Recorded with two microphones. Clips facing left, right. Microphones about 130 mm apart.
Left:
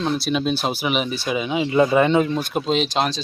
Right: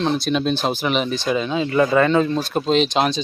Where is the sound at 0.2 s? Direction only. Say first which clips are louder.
Right 1 dB; 5° left (ahead or behind).